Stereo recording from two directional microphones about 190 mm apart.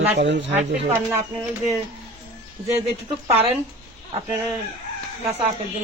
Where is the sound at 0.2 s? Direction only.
65° right (ahead or behind).